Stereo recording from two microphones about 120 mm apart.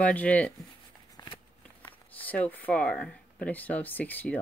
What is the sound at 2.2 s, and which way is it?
Speech, 15° left (ahead or behind).